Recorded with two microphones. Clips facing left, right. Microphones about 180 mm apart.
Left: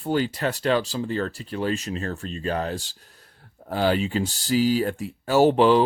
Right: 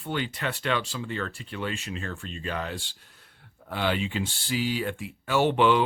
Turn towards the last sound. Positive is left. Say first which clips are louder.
# left 5 dB
turn(degrees=35)  # may be behind; listen again after turning